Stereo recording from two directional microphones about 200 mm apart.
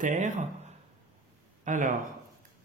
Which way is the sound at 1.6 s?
40° right (ahead or behind).